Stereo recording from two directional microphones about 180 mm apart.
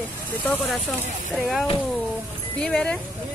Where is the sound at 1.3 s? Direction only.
Centre (ahead or behind).